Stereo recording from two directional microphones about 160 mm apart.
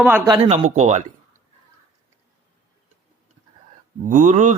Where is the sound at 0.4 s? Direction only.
40° right (ahead or behind).